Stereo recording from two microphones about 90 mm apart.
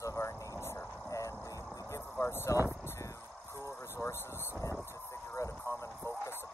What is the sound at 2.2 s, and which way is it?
Vehicle, 30° left (ahead or behind).